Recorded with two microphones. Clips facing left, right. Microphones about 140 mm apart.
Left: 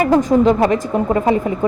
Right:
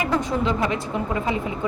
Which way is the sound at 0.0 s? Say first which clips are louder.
Left 10 dB; 45° left (ahead or behind).